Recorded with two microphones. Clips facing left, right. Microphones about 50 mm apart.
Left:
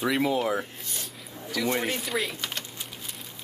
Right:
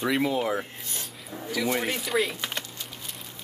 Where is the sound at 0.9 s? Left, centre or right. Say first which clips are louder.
Right 3 dB; centre.